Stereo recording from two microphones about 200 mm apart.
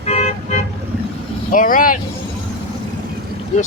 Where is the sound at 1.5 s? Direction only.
40° left (ahead or behind).